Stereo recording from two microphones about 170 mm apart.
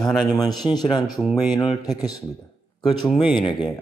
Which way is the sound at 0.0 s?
Centre (ahead or behind).